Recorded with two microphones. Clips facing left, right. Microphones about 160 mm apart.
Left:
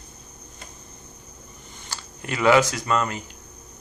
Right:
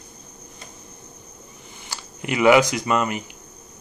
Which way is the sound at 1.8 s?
15° right (ahead or behind).